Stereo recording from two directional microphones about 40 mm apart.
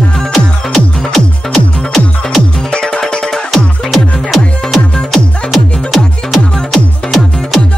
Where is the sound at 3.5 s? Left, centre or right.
Centre.